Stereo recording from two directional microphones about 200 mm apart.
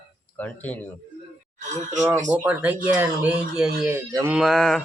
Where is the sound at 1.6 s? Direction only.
35° right (ahead or behind).